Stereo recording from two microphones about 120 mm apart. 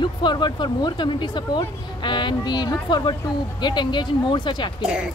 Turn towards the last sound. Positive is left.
turn(degrees=-10)  # may be behind; listen again after turning